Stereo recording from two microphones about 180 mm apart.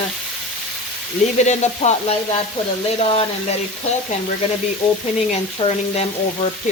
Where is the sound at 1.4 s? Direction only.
40° left (ahead or behind).